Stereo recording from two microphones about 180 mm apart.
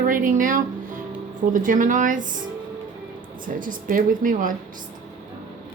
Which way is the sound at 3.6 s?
50° right (ahead or behind).